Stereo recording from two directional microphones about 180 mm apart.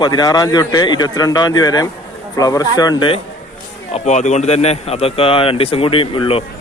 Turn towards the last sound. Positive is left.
turn(degrees=30)  # may be behind; listen again after turning